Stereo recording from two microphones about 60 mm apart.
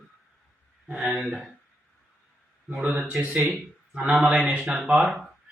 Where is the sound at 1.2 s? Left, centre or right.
Centre.